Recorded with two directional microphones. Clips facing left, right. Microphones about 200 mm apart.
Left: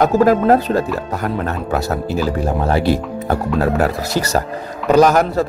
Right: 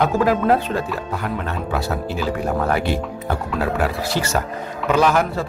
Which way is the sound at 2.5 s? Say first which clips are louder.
Left 4 dB; 30° left (ahead or behind).